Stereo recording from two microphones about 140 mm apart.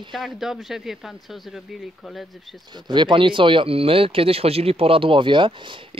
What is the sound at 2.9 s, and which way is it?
Speech, 35° right (ahead or behind).